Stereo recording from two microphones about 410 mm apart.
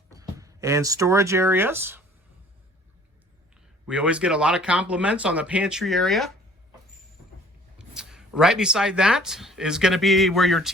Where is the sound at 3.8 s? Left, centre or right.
Centre.